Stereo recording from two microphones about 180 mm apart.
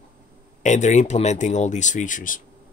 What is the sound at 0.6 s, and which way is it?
Speech, 40° left (ahead or behind).